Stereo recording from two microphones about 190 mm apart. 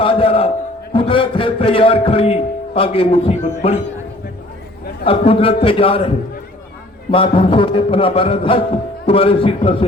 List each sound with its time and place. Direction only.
0.0 s a sound: 30° left (ahead or behind)
0.9 s a man's voice: 25° left (ahead or behind)
5.0 s a man's voice: 30° left (ahead or behind)
7.1 s a man's voice: 25° left (ahead or behind)